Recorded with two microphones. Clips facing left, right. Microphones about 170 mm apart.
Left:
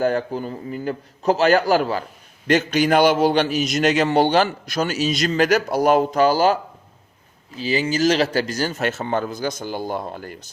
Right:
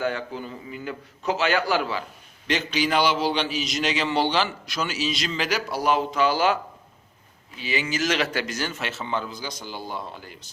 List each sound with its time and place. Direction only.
0.0 s a man's voice: 40° left (ahead or behind)